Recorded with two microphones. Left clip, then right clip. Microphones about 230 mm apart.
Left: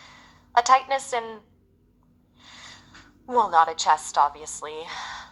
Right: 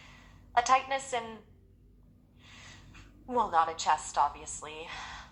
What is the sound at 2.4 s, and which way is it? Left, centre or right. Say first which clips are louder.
Snort: left 7 dB; left.